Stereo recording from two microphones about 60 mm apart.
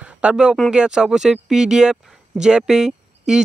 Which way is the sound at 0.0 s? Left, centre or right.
Right.